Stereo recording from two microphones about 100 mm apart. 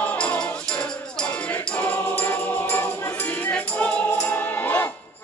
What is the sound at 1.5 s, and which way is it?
Music, 15° left (ahead or behind).